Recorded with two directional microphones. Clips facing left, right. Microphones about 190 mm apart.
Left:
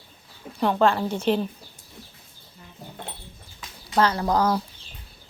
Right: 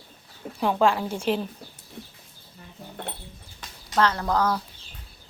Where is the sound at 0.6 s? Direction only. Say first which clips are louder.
Left 1 dB; 5° right (ahead or behind).